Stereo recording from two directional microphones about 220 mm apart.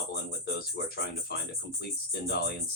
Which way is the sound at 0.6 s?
45° left (ahead or behind).